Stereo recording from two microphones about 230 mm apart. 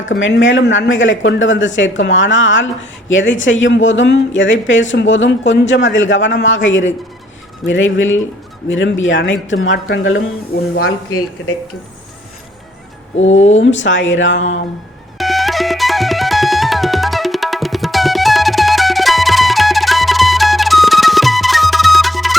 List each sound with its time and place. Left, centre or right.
0.0 s speech: left
10.8 s speech: left
13.1 s speech: left
13.6 s speech: left
15.2 s music: centre